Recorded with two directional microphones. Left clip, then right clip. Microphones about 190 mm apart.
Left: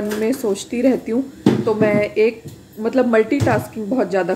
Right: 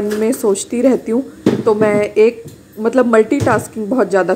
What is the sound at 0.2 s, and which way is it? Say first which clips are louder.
A woman's voice: right 5 dB; 15° right (ahead or behind).